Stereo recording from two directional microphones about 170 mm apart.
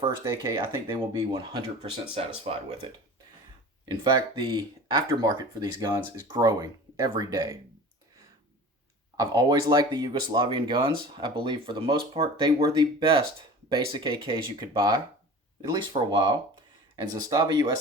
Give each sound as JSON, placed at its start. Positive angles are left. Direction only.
{"t": 0.0, "sound": "speech", "side_deg": -20}
{"t": 9.1, "sound": "speech", "side_deg": -20}